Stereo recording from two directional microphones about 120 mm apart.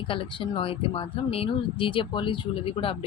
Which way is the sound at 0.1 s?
45° left (ahead or behind).